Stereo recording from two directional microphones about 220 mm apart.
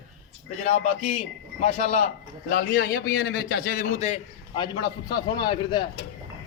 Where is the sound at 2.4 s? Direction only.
45° left (ahead or behind); by 5.9 s 20° left (ahead or behind).